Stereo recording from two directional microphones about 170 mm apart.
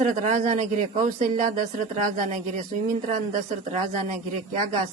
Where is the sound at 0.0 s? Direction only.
50° right (ahead or behind).